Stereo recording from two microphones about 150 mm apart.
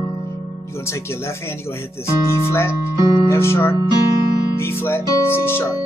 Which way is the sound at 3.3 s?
15° left (ahead or behind).